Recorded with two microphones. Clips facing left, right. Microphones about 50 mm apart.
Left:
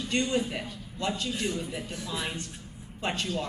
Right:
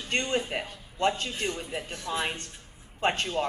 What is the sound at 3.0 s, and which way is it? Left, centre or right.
Speech, right.